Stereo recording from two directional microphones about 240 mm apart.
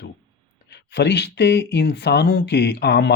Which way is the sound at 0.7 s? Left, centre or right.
Left.